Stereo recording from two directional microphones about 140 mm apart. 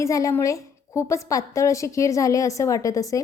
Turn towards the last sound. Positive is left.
turn(degrees=25)  # may be behind; listen again after turning